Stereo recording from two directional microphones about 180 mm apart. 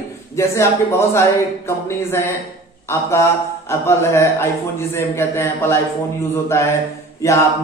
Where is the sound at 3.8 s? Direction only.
15° left (ahead or behind).